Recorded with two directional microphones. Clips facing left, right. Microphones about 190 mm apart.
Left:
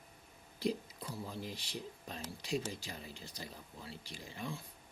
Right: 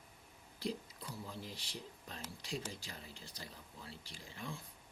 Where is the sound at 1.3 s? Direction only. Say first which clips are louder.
Left 4 dB; 15° left (ahead or behind).